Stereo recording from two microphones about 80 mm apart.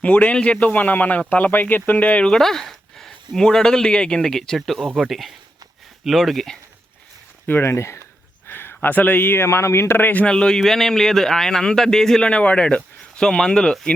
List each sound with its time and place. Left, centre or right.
0.0 s a man's voice: centre
7.4 s speech: left
10.2 s a man's voice: centre